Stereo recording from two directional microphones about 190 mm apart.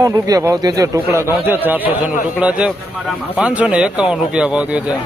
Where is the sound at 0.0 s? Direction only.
15° right (ahead or behind).